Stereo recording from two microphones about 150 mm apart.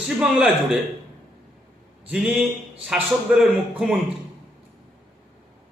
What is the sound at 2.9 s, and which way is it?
Speech, 5° right (ahead or behind).